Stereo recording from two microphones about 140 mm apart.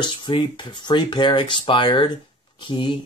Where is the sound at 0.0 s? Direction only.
35° left (ahead or behind).